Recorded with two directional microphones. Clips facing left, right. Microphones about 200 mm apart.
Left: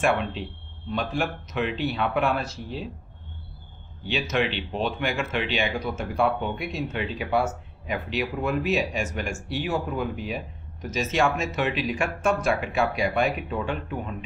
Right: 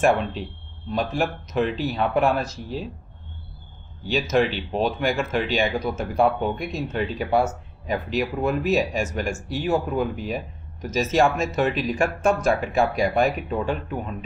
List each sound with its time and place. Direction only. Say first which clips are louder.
0.0 s speech: right 4 dB; 40° right (ahead or behind)
4.0 s speech: right 5 dB; 40° right (ahead or behind)